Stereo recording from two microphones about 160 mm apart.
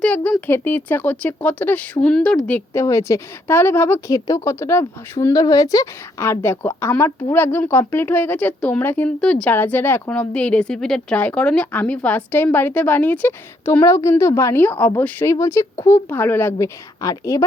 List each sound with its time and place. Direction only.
0.0 s speech: 10° left (ahead or behind)